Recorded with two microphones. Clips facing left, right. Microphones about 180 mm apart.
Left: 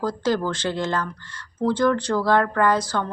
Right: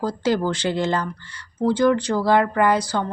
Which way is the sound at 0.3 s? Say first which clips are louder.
Right 3 dB; 10° right (ahead or behind).